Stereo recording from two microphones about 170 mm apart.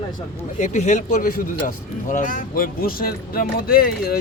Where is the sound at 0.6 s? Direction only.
45° left (ahead or behind).